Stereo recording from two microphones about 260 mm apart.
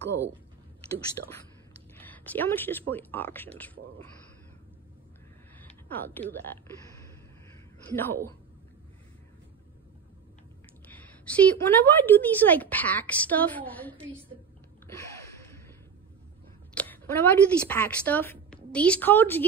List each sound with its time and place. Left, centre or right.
1.2 s speech: right
2.0 s a woman's voice: centre
5.6 s a sound: centre
7.9 s a woman's voice: centre
10.9 s a woman's voice: centre
16.8 s a woman's voice: centre